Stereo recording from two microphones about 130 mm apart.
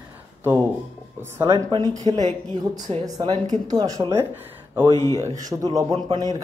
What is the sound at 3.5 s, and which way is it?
Speech, 30° right (ahead or behind).